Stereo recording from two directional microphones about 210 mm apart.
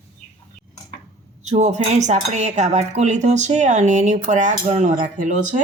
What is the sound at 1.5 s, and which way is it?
A man's voice, 35° right (ahead or behind).